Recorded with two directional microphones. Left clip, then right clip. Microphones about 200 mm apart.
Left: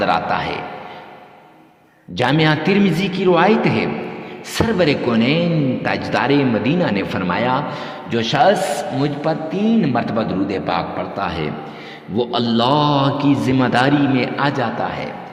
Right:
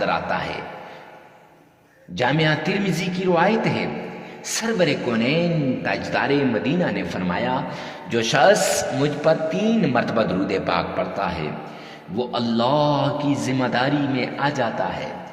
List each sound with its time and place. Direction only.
0.0 s a man's voice: 20° left (ahead or behind)
2.1 s a man's voice: 25° left (ahead or behind)
8.1 s a man's voice: 10° left (ahead or behind)